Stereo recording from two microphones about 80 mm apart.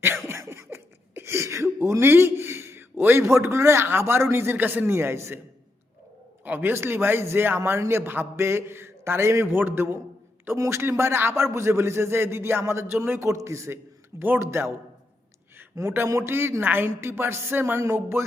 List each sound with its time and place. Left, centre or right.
0.3 s cough: right
1.8 s a man's voice: right
6.4 s a man's voice: right
15.5 s a sound: right
16.0 s speech: right